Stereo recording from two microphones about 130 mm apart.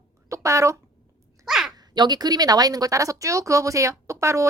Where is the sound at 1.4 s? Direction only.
5° right (ahead or behind).